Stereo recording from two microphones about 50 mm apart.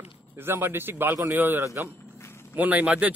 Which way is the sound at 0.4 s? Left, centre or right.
Right.